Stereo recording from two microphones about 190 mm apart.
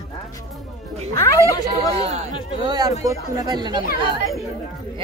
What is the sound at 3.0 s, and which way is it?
Speech, 20° right (ahead or behind).